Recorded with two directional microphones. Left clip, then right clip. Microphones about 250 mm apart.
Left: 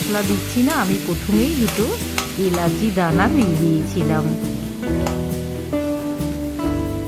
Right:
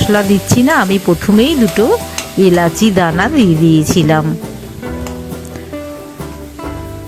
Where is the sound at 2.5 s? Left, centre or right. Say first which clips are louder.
Right 8 dB; right.